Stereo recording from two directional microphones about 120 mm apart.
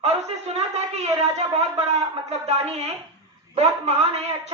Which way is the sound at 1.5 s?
60° right (ahead or behind).